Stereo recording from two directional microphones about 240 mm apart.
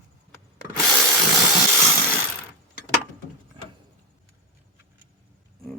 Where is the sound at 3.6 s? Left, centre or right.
Right.